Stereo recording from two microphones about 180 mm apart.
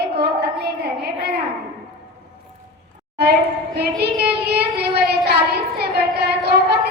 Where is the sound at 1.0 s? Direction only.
65° right (ahead or behind).